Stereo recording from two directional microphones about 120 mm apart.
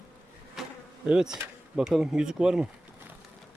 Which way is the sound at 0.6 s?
Centre (ahead or behind).